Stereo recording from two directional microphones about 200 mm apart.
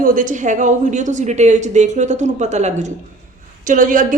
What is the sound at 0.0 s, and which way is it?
A woman's voice, 40° right (ahead or behind).